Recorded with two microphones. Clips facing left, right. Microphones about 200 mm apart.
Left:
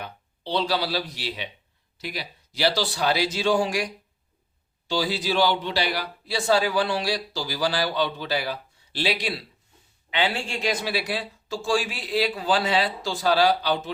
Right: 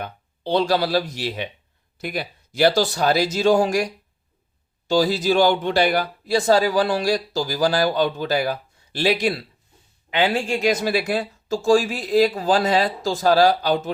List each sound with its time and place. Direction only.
0.0 s speech: 50° right (ahead or behind)
4.9 s speech: 45° right (ahead or behind)